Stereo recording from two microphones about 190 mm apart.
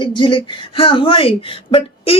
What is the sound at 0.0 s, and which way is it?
Speech, 25° left (ahead or behind).